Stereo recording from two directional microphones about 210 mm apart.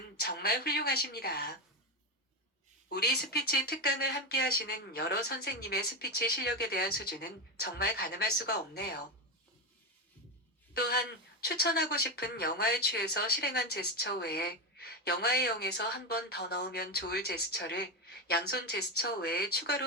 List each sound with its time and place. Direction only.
0.2 s speech: 50° left (ahead or behind)
2.9 s speech: 50° left (ahead or behind)
10.8 s speech: 45° left (ahead or behind)